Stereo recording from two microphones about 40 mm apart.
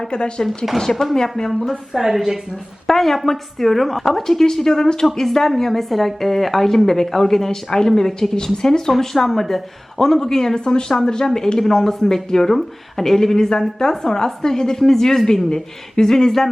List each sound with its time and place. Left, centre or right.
0.0 s speech: left
0.4 s speech: centre
0.8 s a woman's voice: centre
1.9 s a woman's voice: centre
2.8 s a woman's voice: centre
8.9 s a woman's voice: centre